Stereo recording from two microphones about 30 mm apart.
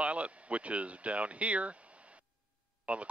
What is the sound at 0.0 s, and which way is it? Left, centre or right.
Speech, right.